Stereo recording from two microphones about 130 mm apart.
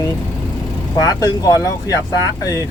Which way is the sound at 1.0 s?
25° left (ahead or behind).